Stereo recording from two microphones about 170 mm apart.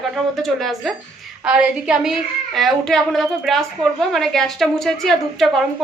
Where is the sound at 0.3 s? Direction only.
Centre (ahead or behind).